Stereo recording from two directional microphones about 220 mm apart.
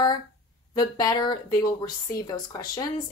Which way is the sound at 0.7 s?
15° left (ahead or behind).